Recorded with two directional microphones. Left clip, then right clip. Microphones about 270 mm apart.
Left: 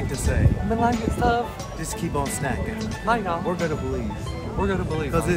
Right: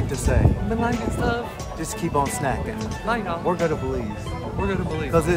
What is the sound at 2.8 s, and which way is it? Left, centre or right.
Speech, centre.